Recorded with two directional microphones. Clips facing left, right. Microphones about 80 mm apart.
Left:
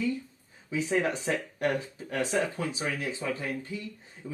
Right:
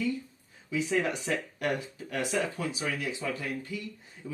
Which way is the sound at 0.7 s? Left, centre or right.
Left.